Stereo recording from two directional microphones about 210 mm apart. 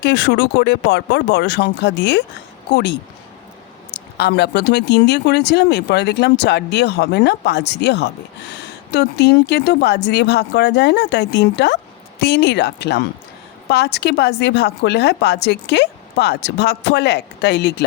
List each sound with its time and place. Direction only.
0.0 s a woman's voice: 55° left (ahead or behind)
4.2 s a woman's voice: 50° left (ahead or behind)